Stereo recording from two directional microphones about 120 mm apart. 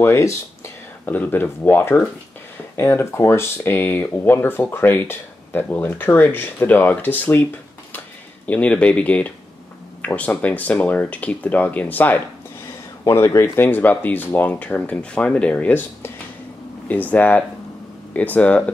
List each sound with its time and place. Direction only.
0.0 s speech: 25° left (ahead or behind)
8.5 s speech: 10° left (ahead or behind)
13.0 s speech: 25° left (ahead or behind)